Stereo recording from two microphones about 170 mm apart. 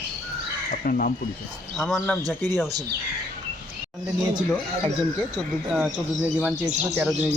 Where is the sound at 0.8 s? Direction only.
55° left (ahead or behind).